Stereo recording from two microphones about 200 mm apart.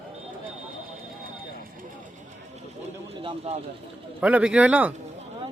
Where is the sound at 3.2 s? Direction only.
30° right (ahead or behind).